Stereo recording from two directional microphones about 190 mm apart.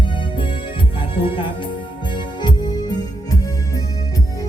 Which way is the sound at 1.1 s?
25° left (ahead or behind).